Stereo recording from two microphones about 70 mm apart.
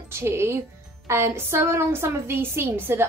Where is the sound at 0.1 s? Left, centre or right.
Right.